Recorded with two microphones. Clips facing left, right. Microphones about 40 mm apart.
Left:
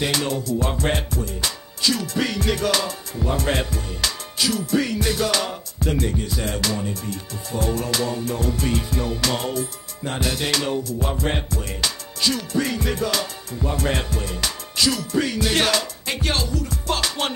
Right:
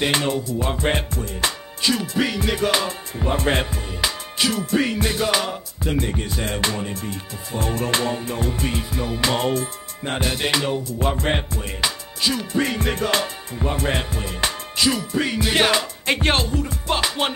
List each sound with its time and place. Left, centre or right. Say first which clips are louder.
0.0 s music: right 2 dB; right
2.1 s music: right 1 dB; centre
5.9 s music: even; right; by 9.2 s centre
9.4 s music: right 4 dB; right
11.0 s music: right 2 dB; right
11.8 s music: right 2 dB; centre
12.5 s music: right 1 dB; right
13.2 s music: right 2 dB; right
16.1 s music: right 5 dB; right